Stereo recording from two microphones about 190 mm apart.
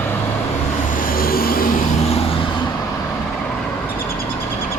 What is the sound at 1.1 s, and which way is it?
Vehicle, 50° left (ahead or behind).